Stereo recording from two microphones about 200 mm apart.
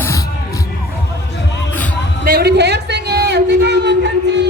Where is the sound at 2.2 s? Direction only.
50° right (ahead or behind).